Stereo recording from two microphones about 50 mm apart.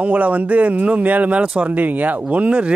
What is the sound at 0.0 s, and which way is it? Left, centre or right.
Speech, right.